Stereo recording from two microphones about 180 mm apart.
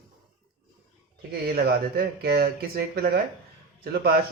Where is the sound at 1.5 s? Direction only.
55° right (ahead or behind).